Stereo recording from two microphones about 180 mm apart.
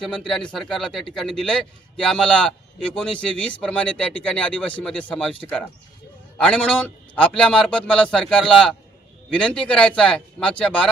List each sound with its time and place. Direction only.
0.0 s a man's voice: 5° left (ahead or behind)